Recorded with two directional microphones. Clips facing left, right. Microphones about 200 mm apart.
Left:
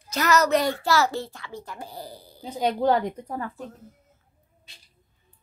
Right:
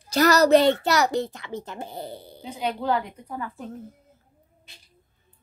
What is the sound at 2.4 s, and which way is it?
A woman's voice, 40° left (ahead or behind).